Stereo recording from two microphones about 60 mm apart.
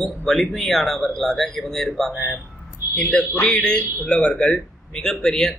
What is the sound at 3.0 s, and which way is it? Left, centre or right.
A man's voice, centre.